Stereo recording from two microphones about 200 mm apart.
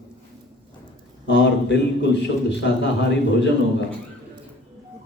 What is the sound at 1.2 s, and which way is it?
Speech, 60° left (ahead or behind).